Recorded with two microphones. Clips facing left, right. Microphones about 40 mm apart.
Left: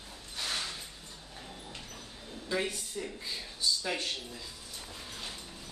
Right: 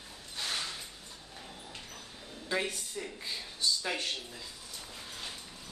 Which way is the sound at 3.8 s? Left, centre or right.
Centre.